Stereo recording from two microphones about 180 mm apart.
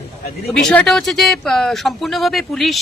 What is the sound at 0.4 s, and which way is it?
Speech, 5° left (ahead or behind).